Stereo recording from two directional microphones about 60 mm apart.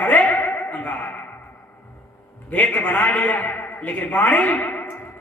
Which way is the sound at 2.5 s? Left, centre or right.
Left.